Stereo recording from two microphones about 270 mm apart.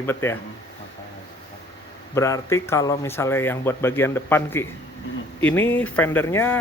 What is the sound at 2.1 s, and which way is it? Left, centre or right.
Speech, centre.